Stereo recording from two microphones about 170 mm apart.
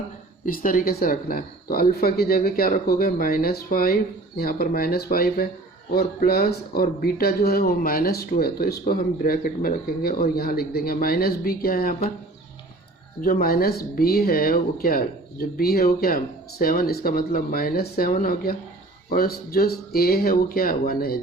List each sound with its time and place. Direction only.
0.4 s speech: 55° left (ahead or behind)
13.2 s speech: 60° left (ahead or behind)